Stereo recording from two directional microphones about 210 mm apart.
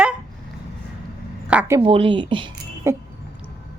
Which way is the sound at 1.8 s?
25° right (ahead or behind).